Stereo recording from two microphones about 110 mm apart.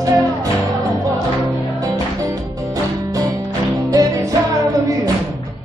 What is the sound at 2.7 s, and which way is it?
Music, 35° right (ahead or behind).